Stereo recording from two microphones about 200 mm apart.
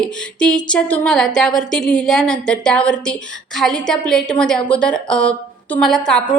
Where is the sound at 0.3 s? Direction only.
5° left (ahead or behind).